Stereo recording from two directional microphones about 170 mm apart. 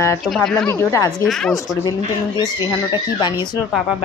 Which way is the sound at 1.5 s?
20° left (ahead or behind).